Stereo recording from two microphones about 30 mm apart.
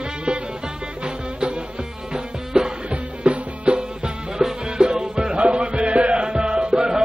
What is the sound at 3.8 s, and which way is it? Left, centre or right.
Music, right.